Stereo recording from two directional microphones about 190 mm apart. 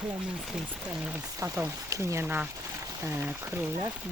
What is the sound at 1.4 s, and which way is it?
Speech, 15° right (ahead or behind).